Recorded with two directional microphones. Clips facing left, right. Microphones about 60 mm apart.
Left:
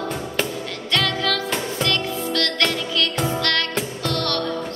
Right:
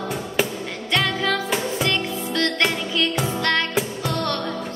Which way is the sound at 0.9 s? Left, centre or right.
Centre.